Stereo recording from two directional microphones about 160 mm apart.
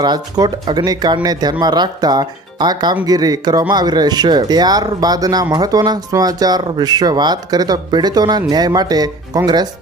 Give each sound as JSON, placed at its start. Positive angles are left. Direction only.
{"t": 0.0, "sound": "speech", "side_deg": -25}